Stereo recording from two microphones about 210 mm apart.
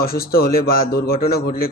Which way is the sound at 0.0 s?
45° left (ahead or behind).